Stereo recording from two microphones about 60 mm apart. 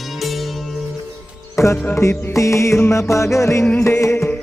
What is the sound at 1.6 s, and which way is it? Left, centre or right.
Music, left.